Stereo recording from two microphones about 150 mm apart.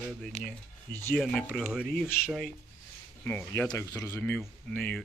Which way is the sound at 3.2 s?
15° left (ahead or behind).